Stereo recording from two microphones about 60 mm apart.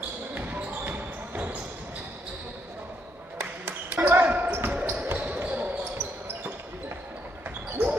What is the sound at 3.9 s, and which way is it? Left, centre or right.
Basketball bounce, right.